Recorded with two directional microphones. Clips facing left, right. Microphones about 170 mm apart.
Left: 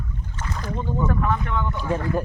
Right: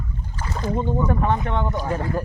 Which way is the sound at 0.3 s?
30° right (ahead or behind).